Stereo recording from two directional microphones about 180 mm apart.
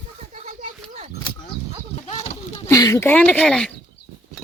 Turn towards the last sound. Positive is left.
turn(degrees=5)  # may be behind; listen again after turning